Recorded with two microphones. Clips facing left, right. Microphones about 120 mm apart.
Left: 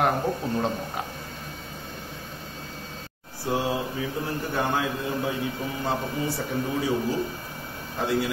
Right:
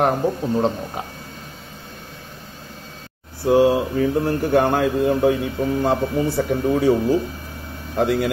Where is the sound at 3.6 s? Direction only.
55° right (ahead or behind).